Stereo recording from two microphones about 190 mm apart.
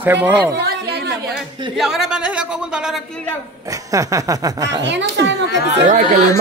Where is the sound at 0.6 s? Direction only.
60° right (ahead or behind).